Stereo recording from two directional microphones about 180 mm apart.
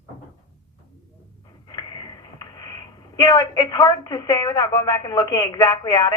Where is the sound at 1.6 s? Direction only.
20° left (ahead or behind).